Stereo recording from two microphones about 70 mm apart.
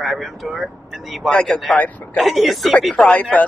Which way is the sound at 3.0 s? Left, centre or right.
Centre.